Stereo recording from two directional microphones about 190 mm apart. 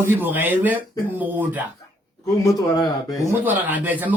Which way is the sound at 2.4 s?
20° left (ahead or behind).